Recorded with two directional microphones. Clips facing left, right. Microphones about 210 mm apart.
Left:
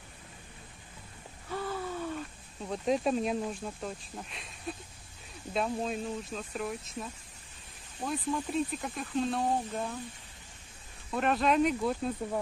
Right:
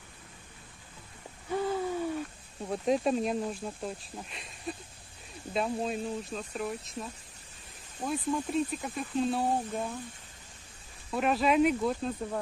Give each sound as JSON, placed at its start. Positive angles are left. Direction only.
{"t": 1.5, "sound": "a sound", "side_deg": -20}
{"t": 2.7, "sound": "speech", "side_deg": 0}
{"t": 11.1, "sound": "speech", "side_deg": -5}